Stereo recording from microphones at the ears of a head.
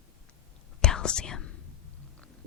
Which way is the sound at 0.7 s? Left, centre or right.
Left.